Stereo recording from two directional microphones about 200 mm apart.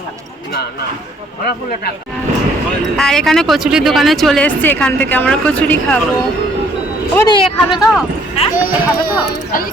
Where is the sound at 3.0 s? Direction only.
Centre (ahead or behind).